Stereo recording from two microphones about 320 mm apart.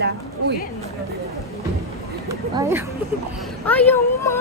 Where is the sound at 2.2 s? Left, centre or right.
Centre.